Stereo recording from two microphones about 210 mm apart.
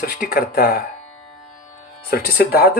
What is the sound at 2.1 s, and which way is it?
Speech, 45° left (ahead or behind).